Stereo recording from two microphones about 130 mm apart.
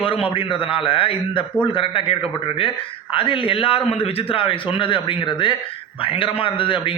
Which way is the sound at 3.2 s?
40° left (ahead or behind).